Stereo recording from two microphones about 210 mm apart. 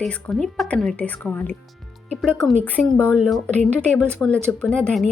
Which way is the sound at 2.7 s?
5° left (ahead or behind).